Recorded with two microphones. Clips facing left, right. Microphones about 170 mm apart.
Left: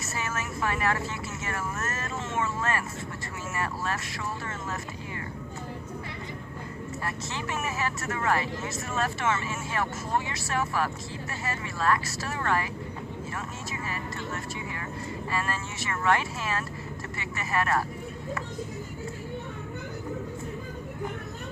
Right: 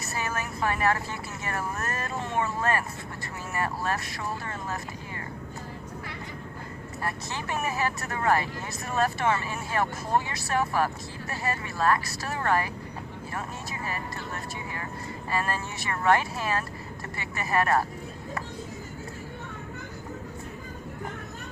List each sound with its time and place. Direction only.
0.2 s vehicle: 35° right (ahead or behind)
1.5 s speech: 35° right (ahead or behind)
7.5 s speech: 35° right (ahead or behind)
11.8 s speech: 35° right (ahead or behind)
15.3 s speech: 35° right (ahead or behind)